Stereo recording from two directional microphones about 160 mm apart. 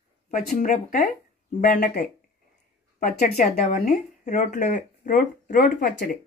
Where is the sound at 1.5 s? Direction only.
65° left (ahead or behind); by 2.0 s 85° left.